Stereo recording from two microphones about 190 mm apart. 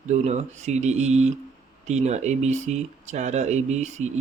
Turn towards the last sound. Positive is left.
turn(degrees=-35)  # may be behind; listen again after turning